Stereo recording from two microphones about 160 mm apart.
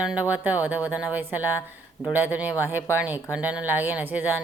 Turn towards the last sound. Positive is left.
turn(degrees=-10)  # may be behind; listen again after turning